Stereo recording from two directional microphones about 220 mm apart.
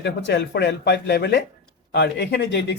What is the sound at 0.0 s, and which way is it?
Speech, 50° left (ahead or behind).